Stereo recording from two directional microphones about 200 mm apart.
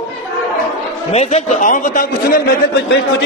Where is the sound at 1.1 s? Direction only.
30° left (ahead or behind).